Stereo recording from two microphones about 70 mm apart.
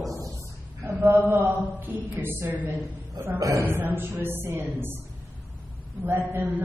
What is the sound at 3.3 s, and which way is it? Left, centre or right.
Speech, right.